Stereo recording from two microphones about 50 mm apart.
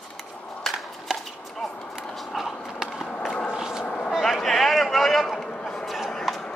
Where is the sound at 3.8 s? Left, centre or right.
Left.